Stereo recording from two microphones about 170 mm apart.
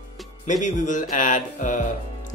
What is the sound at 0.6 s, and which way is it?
Speech, 45° left (ahead or behind).